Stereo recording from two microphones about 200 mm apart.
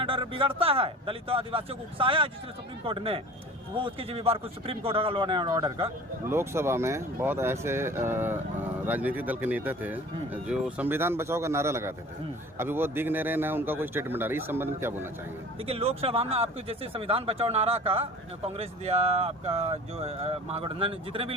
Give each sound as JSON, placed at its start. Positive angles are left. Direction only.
{"t": 0.0, "sound": "speech", "side_deg": -25}
{"t": 6.2, "sound": "speech", "side_deg": -10}
{"t": 15.6, "sound": "speech", "side_deg": -30}